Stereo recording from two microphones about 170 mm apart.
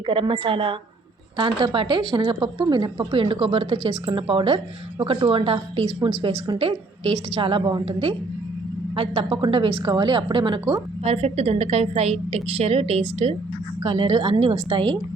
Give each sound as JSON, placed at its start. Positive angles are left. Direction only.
{"t": 0.0, "sound": "a woman's voice", "side_deg": -30}
{"t": 11.0, "sound": "a woman's voice", "side_deg": -40}